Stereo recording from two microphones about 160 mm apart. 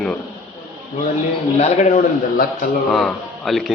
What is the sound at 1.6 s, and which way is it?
Speech, 45° left (ahead or behind).